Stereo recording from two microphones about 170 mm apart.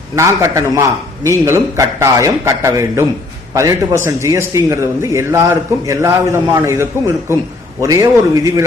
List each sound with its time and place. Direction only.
0.2 s a man's voice: 20° right (ahead or behind)